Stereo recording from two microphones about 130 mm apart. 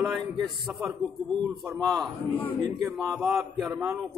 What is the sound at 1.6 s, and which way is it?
Speech, centre (ahead or behind).